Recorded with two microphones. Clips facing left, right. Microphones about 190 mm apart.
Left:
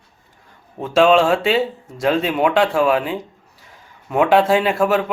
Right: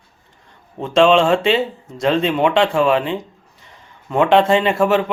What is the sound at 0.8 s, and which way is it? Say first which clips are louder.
Speech: right 1 dB; 5° left (ahead or behind).